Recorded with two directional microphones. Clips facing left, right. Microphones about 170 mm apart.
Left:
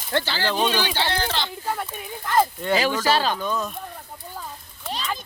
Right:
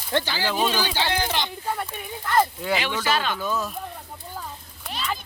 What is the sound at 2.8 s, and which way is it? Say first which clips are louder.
Speech: left 4 dB; 35° left (ahead or behind).